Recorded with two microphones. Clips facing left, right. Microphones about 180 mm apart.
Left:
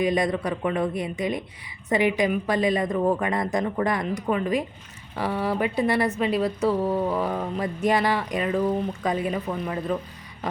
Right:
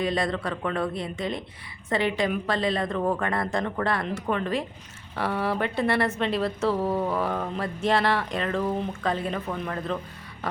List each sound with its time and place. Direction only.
0.0 s a woman's voice: 15° left (ahead or behind)